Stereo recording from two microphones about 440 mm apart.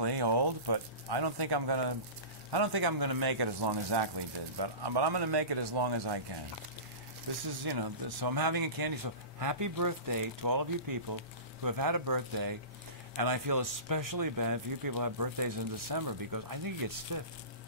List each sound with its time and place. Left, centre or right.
0.0 s speech: right
7.6 s speech: right